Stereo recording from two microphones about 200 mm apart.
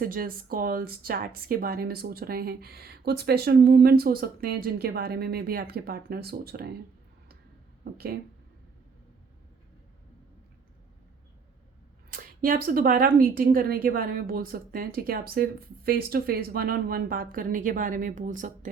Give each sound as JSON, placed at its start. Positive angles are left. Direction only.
{"t": 0.0, "sound": "speech", "side_deg": -45}
{"t": 7.9, "sound": "speech", "side_deg": -50}
{"t": 12.1, "sound": "speech", "side_deg": -45}